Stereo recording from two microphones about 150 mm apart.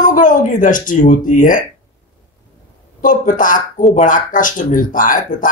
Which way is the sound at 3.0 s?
60° left (ahead or behind).